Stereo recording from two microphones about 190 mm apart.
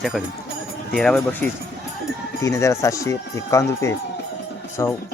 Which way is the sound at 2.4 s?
15° left (ahead or behind).